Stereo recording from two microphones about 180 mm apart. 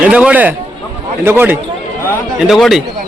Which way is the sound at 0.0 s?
10° right (ahead or behind).